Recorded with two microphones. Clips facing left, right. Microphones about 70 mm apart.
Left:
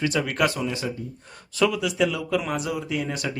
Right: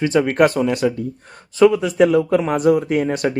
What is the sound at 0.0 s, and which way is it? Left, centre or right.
Speech, right.